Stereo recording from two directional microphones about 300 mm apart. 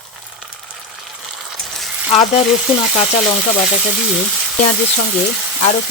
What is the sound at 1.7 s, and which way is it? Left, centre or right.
Frying, centre.